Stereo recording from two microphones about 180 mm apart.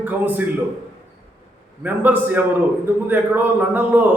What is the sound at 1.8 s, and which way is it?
A man's voice, 10° right (ahead or behind).